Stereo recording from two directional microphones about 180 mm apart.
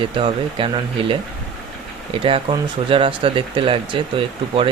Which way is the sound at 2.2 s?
30° right (ahead or behind).